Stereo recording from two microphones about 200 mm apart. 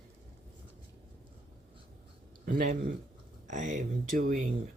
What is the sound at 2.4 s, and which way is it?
Speech, 45° right (ahead or behind).